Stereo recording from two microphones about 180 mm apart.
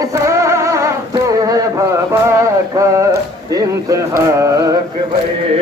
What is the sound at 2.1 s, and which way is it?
Male singing, 15° right (ahead or behind).